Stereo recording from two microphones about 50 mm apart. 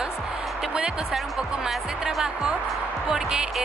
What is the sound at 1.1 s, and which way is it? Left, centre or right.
Speech, centre.